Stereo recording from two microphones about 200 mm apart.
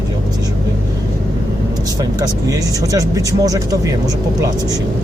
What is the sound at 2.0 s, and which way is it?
Speech, 20° right (ahead or behind).